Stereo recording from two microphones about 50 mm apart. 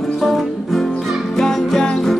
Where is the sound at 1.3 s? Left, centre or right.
Centre.